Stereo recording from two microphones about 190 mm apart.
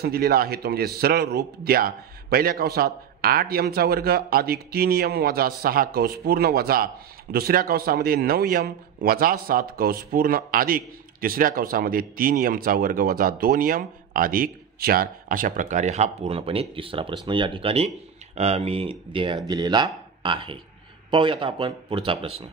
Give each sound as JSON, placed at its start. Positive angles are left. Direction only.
{"t": 0.0, "sound": "a man's voice", "side_deg": -55}